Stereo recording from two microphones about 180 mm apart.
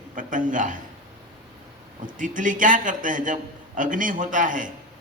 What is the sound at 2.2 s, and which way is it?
A man's voice, 45° right (ahead or behind).